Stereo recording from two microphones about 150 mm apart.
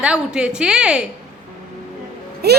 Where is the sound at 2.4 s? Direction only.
90° right.